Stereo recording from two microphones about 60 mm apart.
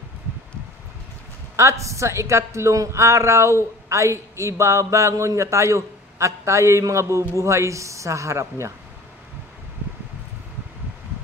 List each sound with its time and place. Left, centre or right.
1.6 s a woman's voice: right